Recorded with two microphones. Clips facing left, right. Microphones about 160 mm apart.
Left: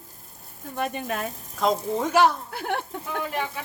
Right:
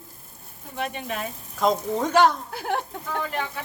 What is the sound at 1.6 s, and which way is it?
Speech, 5° left (ahead or behind).